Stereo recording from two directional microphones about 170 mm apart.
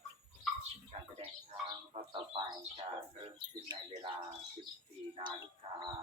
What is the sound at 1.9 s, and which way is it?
Bird, 30° right (ahead or behind).